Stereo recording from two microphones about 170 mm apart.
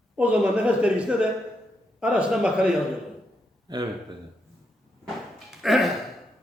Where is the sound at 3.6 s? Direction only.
25° right (ahead or behind).